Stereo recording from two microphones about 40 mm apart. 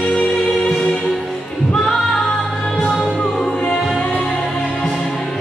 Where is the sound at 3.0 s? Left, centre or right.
Centre.